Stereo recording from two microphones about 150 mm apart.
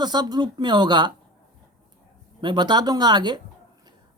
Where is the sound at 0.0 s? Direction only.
30° right (ahead or behind).